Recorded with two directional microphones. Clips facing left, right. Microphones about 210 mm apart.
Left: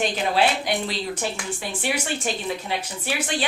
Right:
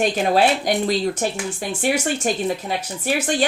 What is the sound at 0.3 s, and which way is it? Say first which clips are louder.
A woman's voice: right 3 dB; 45° right (ahead or behind).